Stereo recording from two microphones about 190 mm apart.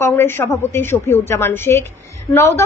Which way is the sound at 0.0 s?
15° left (ahead or behind).